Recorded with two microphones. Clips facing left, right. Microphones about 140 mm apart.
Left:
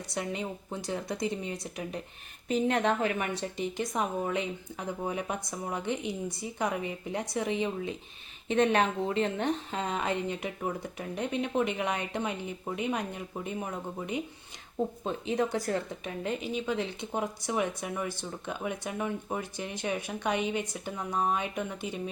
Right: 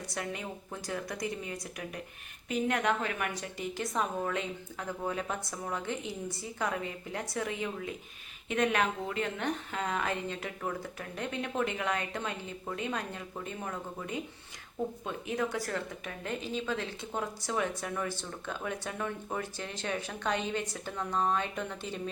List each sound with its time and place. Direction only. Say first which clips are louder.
0.1 s a woman's voice: left 5 dB; 20° left (ahead or behind)